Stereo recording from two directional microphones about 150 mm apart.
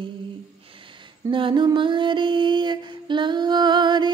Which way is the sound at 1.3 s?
30° right (ahead or behind).